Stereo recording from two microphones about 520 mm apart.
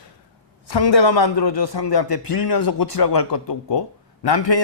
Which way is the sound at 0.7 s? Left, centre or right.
Left.